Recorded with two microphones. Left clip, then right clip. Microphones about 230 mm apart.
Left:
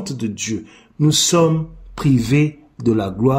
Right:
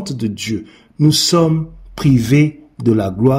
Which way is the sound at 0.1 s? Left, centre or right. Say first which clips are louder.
Right 3 dB; centre.